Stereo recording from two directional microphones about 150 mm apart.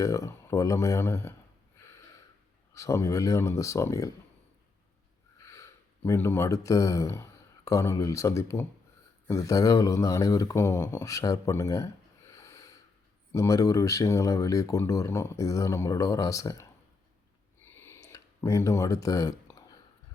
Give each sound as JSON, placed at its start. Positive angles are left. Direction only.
{"t": 0.0, "sound": "speech", "side_deg": 20}
{"t": 2.7, "sound": "speech", "side_deg": 20}
{"t": 5.5, "sound": "speech", "side_deg": 20}
{"t": 17.7, "sound": "a sound", "side_deg": 15}